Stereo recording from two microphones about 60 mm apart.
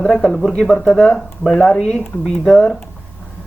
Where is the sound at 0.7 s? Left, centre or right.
Centre.